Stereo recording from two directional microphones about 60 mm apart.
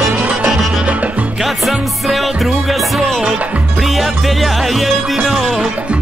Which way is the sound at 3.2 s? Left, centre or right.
Right.